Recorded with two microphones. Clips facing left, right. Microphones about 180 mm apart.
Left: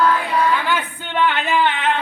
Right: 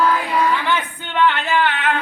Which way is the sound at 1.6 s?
20° left (ahead or behind).